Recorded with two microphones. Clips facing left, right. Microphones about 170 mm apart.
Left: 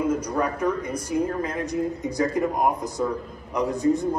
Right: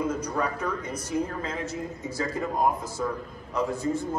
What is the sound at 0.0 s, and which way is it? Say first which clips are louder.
A man's voice: left 4 dB; 10° left (ahead or behind).